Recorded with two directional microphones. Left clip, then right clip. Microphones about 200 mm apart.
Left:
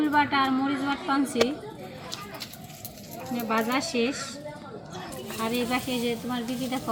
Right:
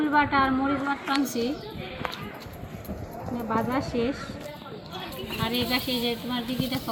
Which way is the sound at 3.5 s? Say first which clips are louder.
Left 1 dB; 20° left (ahead or behind).